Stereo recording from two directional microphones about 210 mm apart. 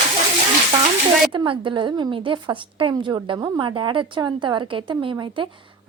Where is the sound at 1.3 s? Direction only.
25° right (ahead or behind).